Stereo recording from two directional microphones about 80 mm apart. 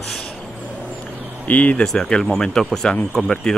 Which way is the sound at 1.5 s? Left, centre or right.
Centre.